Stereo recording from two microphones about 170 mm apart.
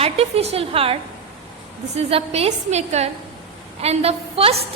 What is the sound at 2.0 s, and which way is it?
A woman's voice, 35° right (ahead or behind).